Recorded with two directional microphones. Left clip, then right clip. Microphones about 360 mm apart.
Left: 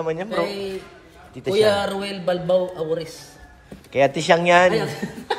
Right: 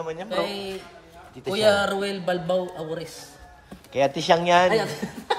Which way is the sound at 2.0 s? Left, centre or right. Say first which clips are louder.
Left 3 dB; right.